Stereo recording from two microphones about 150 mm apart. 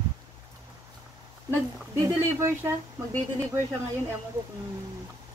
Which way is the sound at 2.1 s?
15° right (ahead or behind).